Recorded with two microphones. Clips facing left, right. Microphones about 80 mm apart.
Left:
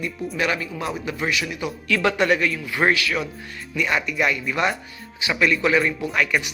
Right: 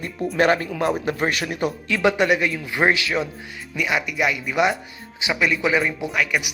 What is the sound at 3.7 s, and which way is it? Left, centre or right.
Speech, centre.